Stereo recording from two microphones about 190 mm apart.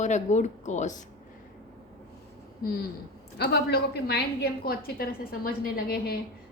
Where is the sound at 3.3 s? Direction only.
60° left (ahead or behind).